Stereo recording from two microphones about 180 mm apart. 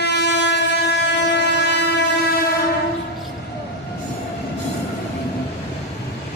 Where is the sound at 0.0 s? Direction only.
70° left (ahead or behind).